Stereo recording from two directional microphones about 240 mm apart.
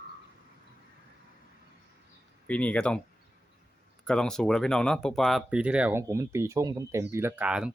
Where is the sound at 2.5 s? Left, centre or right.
Centre.